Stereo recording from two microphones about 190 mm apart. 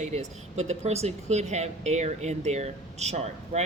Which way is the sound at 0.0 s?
35° right (ahead or behind).